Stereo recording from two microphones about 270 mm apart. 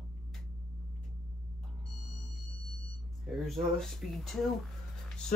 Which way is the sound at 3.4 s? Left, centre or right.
Centre.